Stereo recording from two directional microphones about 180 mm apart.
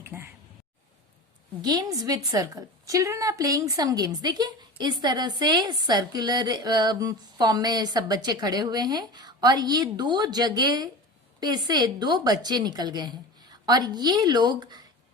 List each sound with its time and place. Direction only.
0.0 s speech: 10° right (ahead or behind)
1.6 s a woman's voice: 20° right (ahead or behind)